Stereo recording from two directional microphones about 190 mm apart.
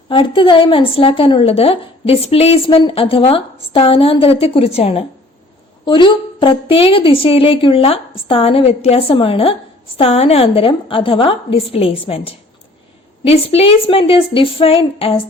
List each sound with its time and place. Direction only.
0.1 s a woman's voice: 25° left (ahead or behind)